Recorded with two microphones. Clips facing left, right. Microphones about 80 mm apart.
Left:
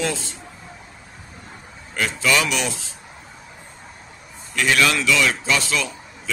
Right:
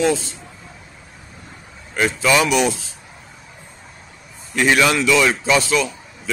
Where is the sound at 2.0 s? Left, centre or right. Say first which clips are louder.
Right 4 dB; right.